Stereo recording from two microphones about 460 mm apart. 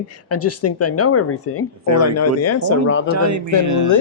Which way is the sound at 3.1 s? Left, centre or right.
Right.